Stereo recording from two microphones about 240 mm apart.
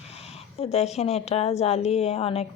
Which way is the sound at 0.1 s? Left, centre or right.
Left.